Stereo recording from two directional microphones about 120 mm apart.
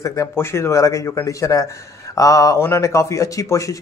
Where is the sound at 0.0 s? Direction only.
25° left (ahead or behind).